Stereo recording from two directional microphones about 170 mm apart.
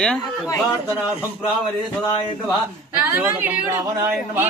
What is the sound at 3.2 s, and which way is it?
Speech, 10° right (ahead or behind).